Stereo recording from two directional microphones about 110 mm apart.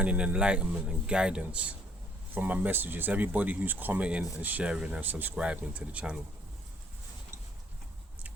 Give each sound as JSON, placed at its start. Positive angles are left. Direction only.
{"t": 0.0, "sound": "speech", "side_deg": -10}